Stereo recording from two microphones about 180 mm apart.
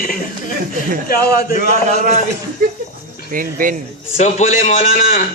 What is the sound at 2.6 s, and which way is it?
Speech, 55° right (ahead or behind).